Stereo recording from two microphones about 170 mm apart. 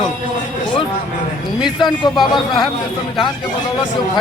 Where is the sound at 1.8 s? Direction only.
25° left (ahead or behind).